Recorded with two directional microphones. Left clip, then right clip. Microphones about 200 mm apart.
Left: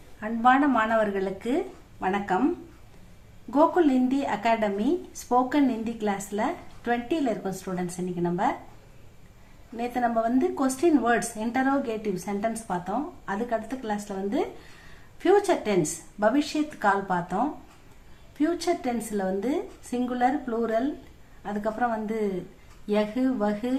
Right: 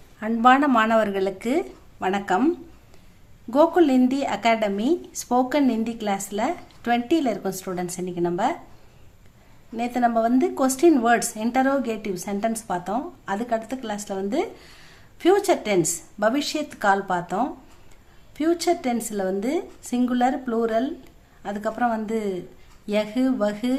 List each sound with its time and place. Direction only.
0.2 s speech: 55° right (ahead or behind)
3.5 s speech: 45° right (ahead or behind)
9.7 s speech: 45° right (ahead or behind)